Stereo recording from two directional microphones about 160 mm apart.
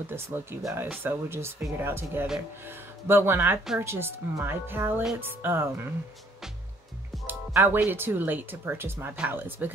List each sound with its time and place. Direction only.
0.0 s speech: 15° right (ahead or behind)
7.2 s speech: 15° right (ahead or behind)